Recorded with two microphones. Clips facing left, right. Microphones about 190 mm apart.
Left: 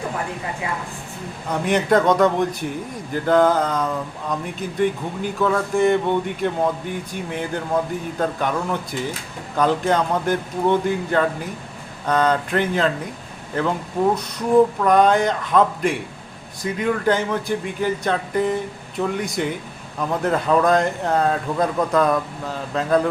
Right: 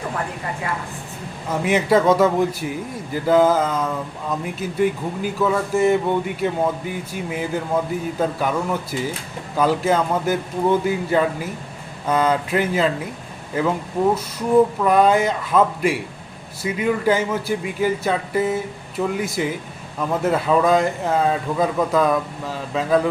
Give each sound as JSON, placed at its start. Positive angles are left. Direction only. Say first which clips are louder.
{"t": 1.5, "sound": "a man's voice", "louder": "even", "side_deg": -5}
{"t": 14.8, "sound": "a man's voice", "louder": "even", "side_deg": -5}